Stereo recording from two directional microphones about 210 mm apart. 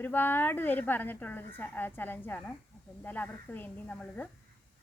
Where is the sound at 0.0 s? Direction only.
10° left (ahead or behind).